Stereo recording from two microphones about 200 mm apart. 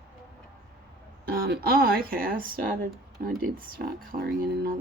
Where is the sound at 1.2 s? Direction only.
50° right (ahead or behind).